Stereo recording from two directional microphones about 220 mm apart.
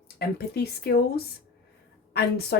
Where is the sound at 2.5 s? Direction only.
45° left (ahead or behind).